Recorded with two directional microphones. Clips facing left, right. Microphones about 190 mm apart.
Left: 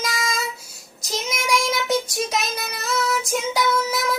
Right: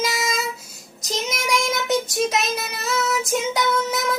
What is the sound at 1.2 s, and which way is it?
Child singing, centre (ahead or behind).